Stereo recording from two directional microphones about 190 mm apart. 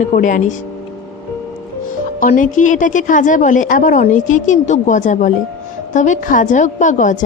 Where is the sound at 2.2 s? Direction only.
40° left (ahead or behind).